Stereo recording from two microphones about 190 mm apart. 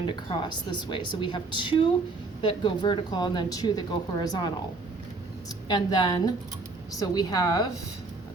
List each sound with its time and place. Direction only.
0.3 s speech: 25° left (ahead or behind)
5.6 s speech: 20° left (ahead or behind)